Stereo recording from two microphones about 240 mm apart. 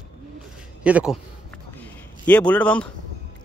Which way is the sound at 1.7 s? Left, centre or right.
Centre.